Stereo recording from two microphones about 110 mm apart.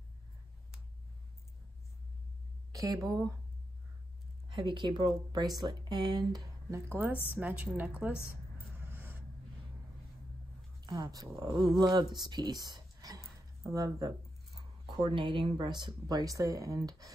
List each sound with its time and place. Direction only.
2.7 s speech: 30° right (ahead or behind)
4.5 s speech: 45° right (ahead or behind)
6.9 s a woman's voice: 20° right (ahead or behind)
8.8 s a sound: 20° right (ahead or behind)
10.8 s speech: 35° right (ahead or behind)
13.6 s a sound: 30° right (ahead or behind); by 15.4 s 50° right (ahead or behind)
15.5 s speech: 45° right (ahead or behind)